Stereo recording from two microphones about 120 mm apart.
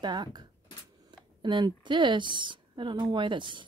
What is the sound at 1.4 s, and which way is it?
A woman's voice, 40° right (ahead or behind).